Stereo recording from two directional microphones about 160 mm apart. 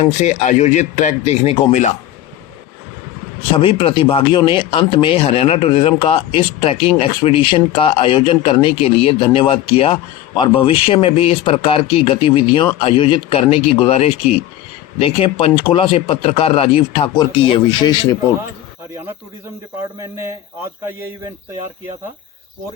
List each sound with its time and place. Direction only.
0.0 s speech: 45° left (ahead or behind)
3.6 s speech: 35° left (ahead or behind)
20.0 s speech: 15° right (ahead or behind)